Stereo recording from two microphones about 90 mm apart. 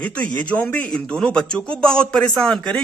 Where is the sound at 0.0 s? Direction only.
15° left (ahead or behind).